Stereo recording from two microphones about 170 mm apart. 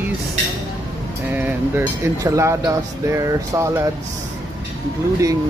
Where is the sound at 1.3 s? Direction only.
10° right (ahead or behind).